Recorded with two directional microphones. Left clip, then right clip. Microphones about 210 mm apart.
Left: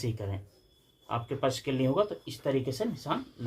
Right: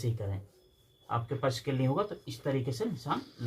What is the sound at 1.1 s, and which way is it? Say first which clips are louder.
Speech: left 2 dB; 40° left (ahead or behind).